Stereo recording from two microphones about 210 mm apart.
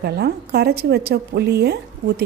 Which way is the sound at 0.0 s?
50° right (ahead or behind).